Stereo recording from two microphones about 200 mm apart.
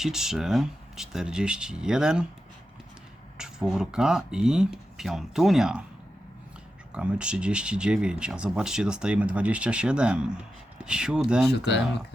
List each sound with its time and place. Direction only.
0.0 s speech: centre (ahead or behind)
3.3 s speech: 5° right (ahead or behind)
6.9 s speech: 5° right (ahead or behind)
11.5 s speech: 60° left (ahead or behind)